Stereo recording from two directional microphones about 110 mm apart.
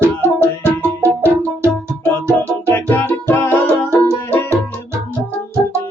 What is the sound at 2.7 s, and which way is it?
Music, 20° left (ahead or behind).